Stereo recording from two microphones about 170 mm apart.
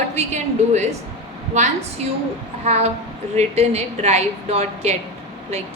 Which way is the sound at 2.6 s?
40° right (ahead or behind).